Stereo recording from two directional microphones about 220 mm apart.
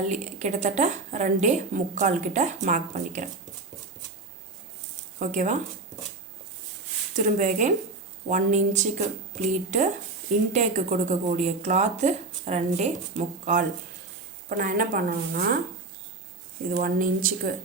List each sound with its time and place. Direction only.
0.1 s a woman's voice: 30° right (ahead or behind)
5.2 s a woman's voice: 35° right (ahead or behind)
7.3 s a woman's voice: 35° right (ahead or behind)
16.8 s a woman's voice: 40° right (ahead or behind)